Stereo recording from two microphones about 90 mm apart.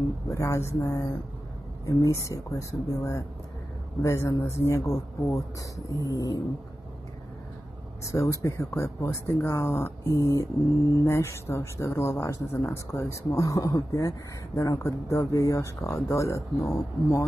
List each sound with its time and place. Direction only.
0.3 s speech: 35° left (ahead or behind)
6.0 s cat: 40° left (ahead or behind)
8.0 s speech: 35° left (ahead or behind)